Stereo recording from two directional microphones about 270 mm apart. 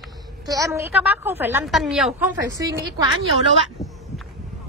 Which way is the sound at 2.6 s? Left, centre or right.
Centre.